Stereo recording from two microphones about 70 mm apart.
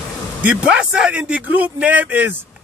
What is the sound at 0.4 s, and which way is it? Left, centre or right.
A man's voice, right.